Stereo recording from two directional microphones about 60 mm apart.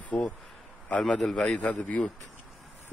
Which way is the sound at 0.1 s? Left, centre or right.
Centre.